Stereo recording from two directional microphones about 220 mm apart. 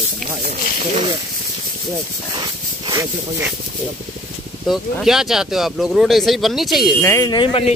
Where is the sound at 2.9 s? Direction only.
15° right (ahead or behind).